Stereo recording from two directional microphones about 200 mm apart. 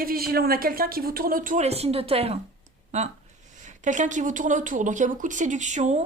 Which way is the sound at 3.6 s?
40° right (ahead or behind).